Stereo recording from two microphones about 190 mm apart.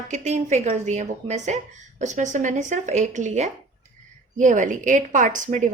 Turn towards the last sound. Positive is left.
turn(degrees=-40)  # may be behind; listen again after turning